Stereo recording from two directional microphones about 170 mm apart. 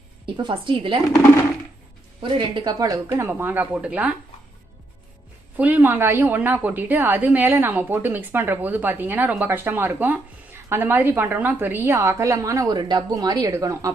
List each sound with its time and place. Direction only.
0.3 s a woman's voice: 30° right (ahead or behind)
2.2 s a woman's voice: 30° right (ahead or behind); by 4.1 s 10° right (ahead or behind)
5.5 s a woman's voice: 10° right (ahead or behind)